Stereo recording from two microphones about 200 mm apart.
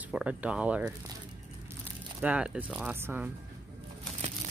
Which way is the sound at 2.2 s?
5° right (ahead or behind).